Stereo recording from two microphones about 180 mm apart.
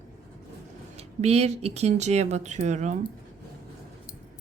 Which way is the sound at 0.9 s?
35° right (ahead or behind).